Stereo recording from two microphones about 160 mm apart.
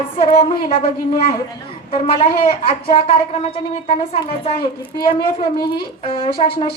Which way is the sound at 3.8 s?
35° left (ahead or behind).